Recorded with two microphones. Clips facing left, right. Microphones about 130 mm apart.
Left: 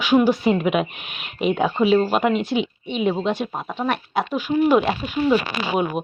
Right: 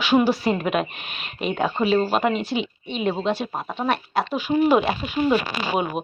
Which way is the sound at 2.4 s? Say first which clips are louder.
Left 3 dB; 60° left (ahead or behind).